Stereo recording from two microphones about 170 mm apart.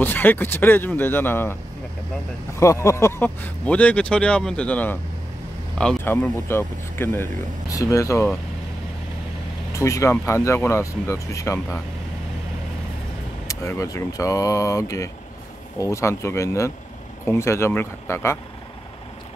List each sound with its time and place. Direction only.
0.0 s speech: 10° left (ahead or behind)
2.6 s speech: 15° left (ahead or behind)
9.7 s speech: 15° left (ahead or behind)
13.5 s speech: 20° left (ahead or behind)